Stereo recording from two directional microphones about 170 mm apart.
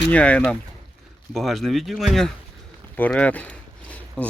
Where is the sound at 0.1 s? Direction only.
10° left (ahead or behind).